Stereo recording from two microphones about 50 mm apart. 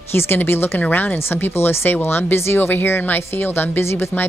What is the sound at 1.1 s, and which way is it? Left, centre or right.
Speech, left.